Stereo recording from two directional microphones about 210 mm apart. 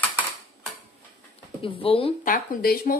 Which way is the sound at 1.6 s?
25° left (ahead or behind).